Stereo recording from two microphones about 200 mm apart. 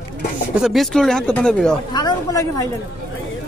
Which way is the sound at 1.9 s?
20° left (ahead or behind).